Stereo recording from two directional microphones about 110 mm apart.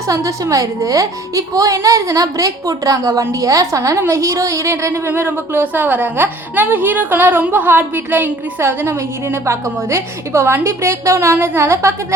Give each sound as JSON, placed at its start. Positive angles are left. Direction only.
{"t": 0.1, "sound": "a child's voice", "side_deg": -30}